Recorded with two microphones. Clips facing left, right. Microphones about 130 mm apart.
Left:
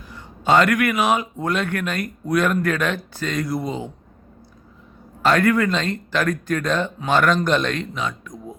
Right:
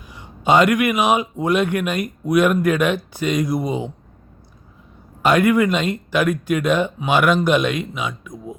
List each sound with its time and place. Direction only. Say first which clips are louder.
0.1 s speech: right 1 dB; 15° right (ahead or behind)
5.2 s speech: right 2 dB; 15° right (ahead or behind)